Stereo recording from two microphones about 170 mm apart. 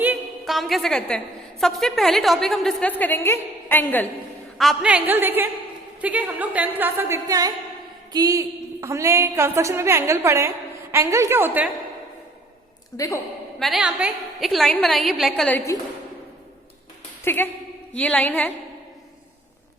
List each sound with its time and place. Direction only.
0.0 s a sound: 5° right (ahead or behind)
1.6 s a woman's voice: centre (ahead or behind)
4.5 s a woman's voice: centre (ahead or behind)
13.6 s a woman's voice: centre (ahead or behind); by 15.8 s 15° left (ahead or behind)
17.2 s a woman's voice: 10° left (ahead or behind)